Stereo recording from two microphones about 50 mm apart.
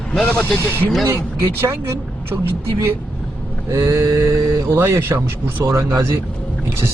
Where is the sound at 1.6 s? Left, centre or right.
Right.